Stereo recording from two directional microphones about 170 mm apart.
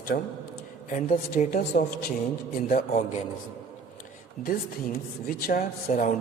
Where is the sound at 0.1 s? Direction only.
65° left (ahead or behind).